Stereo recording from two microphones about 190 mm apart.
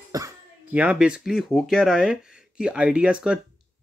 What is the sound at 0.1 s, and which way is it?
Speech, 15° right (ahead or behind).